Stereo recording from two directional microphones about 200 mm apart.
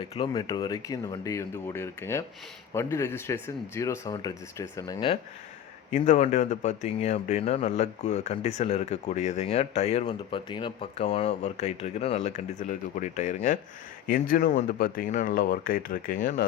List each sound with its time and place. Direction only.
0.0 s speech: 25° left (ahead or behind)
5.9 s speech: 35° left (ahead or behind)